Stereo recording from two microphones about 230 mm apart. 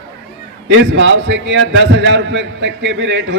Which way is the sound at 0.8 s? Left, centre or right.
Right.